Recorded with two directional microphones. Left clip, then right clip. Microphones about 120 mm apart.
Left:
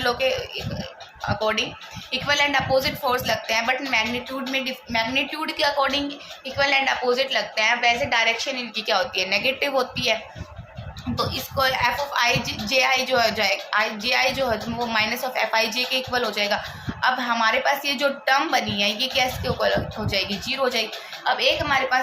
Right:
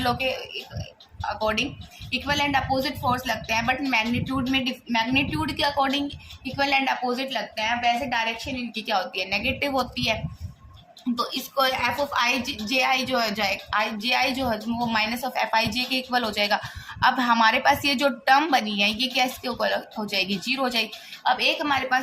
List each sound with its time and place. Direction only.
0.0 s a woman's voice: 35° right (ahead or behind)
11.2 s a woman's voice: 35° right (ahead or behind)